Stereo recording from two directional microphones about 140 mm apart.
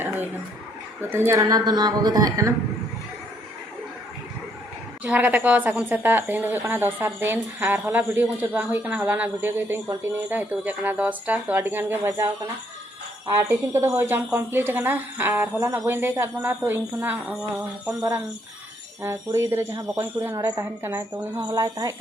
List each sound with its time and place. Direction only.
1.1 s speech: 15° right (ahead or behind)
5.0 s a woman's voice: 10° right (ahead or behind)
13.4 s a woman's voice: 20° right (ahead or behind)
19.0 s a woman's voice: 20° right (ahead or behind)